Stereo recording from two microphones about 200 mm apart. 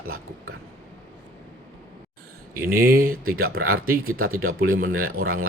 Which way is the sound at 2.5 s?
45° right (ahead or behind).